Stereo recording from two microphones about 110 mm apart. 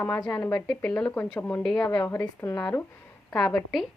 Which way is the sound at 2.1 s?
20° left (ahead or behind).